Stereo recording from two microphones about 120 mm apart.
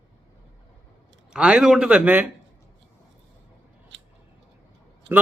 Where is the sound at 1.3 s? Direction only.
10° right (ahead or behind).